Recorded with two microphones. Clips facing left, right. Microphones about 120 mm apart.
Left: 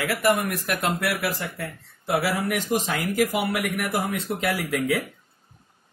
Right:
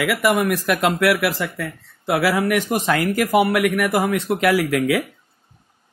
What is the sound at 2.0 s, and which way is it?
A man's voice, 90° right.